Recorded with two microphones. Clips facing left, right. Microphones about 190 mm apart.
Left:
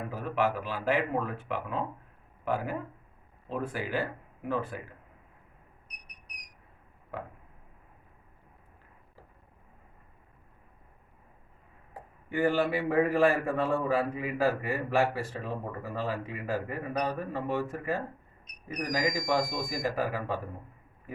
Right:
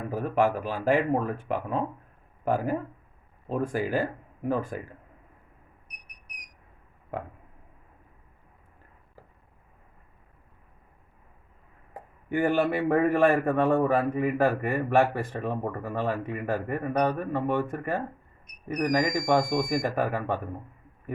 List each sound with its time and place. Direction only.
0.1 s speech: 45° right (ahead or behind)
12.3 s a man's voice: 55° right (ahead or behind)